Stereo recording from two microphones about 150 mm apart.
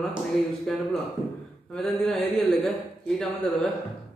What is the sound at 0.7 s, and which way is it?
Speech, 5° left (ahead or behind).